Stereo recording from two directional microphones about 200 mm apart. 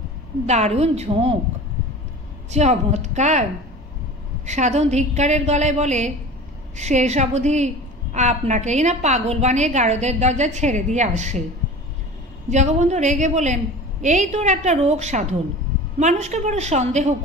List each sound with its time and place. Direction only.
0.5 s a woman's voice: 35° right (ahead or behind)
2.5 s a woman's voice: 35° right (ahead or behind)
4.5 s a woman's voice: 35° right (ahead or behind)
12.4 s a woman's voice: 35° right (ahead or behind)